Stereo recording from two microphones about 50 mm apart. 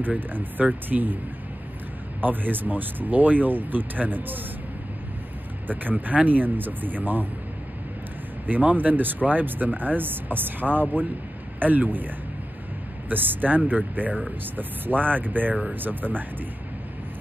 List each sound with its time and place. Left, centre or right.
0.0 s speech: right
2.2 s speech: right
5.7 s speech: right
8.5 s speech: right
13.1 s speech: right